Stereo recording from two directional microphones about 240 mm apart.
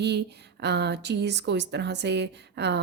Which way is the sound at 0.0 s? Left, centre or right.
Right.